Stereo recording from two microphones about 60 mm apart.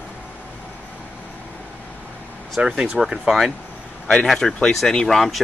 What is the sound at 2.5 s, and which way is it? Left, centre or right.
Speech, centre.